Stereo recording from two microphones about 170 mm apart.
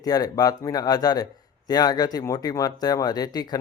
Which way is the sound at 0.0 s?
20° left (ahead or behind).